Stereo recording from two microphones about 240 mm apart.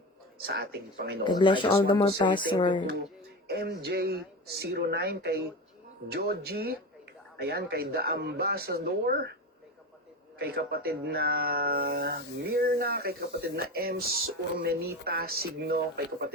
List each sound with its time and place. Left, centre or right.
0.4 s speech: right
1.2 s speech: centre
3.4 s speech: right
10.3 s speech: right